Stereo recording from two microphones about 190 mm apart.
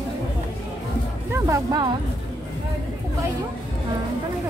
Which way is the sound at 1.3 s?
15° right (ahead or behind).